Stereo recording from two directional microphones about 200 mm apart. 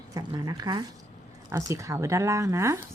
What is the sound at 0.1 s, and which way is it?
Speech, 20° right (ahead or behind).